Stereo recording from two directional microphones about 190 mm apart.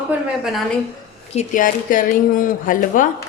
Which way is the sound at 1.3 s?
45° left (ahead or behind).